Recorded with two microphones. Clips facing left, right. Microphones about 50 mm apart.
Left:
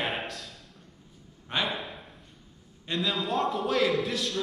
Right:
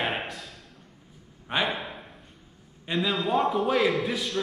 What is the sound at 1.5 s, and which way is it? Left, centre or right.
Speech, centre.